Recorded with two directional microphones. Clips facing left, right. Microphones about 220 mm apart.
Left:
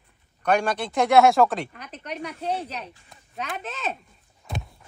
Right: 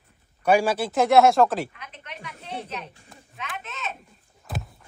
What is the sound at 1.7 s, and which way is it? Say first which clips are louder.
Speech: left 7 dB; 40° left (ahead or behind).